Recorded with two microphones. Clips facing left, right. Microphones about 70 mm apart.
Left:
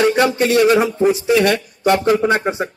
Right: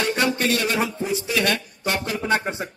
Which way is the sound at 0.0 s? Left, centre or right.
Centre.